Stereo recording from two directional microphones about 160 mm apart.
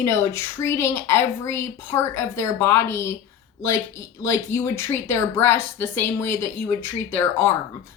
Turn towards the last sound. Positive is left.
turn(degrees=15)  # may be behind; listen again after turning